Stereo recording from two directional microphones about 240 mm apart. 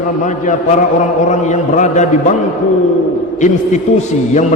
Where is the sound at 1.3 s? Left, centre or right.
Left.